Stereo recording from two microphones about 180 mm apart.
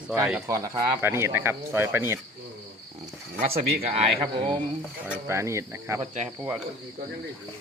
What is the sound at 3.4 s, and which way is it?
Speech, 35° right (ahead or behind).